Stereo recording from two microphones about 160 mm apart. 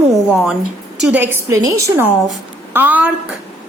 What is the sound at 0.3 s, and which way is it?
Speech, 5° right (ahead or behind).